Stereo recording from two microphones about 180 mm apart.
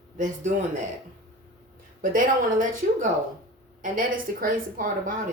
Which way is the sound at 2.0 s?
50° right (ahead or behind).